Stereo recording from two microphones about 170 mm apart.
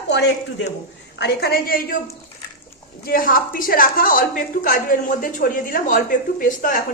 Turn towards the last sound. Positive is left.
turn(degrees=50)  # may be behind; listen again after turning